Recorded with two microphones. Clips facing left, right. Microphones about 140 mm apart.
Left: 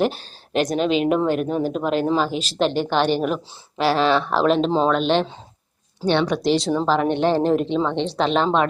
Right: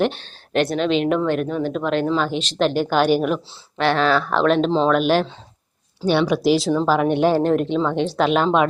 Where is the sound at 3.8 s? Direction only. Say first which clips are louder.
Even; 30° left (ahead or behind).